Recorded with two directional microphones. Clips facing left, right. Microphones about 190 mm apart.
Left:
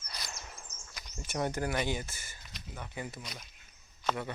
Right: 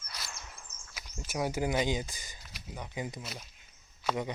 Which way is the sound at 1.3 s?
5° right (ahead or behind).